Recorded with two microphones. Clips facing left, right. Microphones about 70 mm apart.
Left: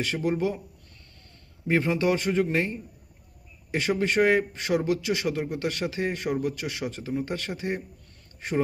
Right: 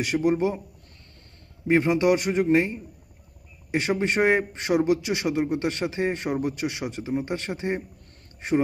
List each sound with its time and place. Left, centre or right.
0.0 s a man's voice: centre
1.6 s a man's voice: centre